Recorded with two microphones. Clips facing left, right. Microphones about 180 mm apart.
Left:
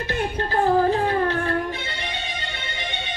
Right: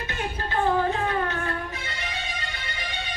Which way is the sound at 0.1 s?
35° left (ahead or behind).